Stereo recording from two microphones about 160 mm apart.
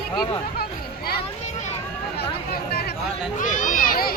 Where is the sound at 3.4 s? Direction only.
55° left (ahead or behind).